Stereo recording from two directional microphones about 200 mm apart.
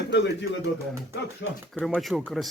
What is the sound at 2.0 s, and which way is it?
Speech, centre (ahead or behind).